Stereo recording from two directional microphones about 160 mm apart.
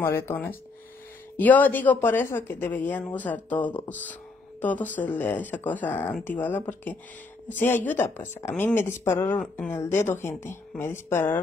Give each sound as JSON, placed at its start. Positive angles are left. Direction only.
{"t": 0.0, "sound": "a woman's voice", "side_deg": 15}